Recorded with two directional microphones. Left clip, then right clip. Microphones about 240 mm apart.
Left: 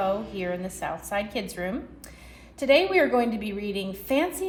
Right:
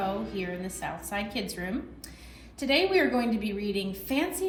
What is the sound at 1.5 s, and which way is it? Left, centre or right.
A woman's voice, left.